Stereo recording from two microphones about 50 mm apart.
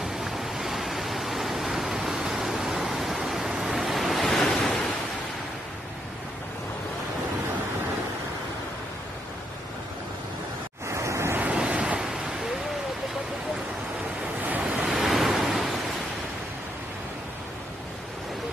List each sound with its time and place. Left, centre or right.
0.0 s waves: centre
1.8 s pink noise: centre
4.6 s waves: centre
10.9 s waves: right
11.3 s waves: right
14.6 s vehicle: centre
14.9 s vehicle: centre